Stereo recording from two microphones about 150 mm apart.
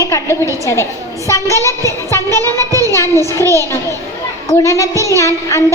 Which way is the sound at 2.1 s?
15° left (ahead or behind).